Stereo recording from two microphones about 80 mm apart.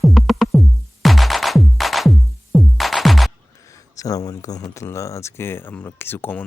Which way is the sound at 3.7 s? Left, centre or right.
Left.